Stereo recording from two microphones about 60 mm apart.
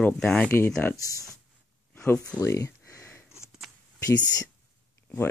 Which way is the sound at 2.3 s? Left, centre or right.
Left.